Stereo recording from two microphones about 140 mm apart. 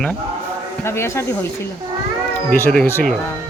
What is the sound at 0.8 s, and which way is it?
Speech, 20° left (ahead or behind).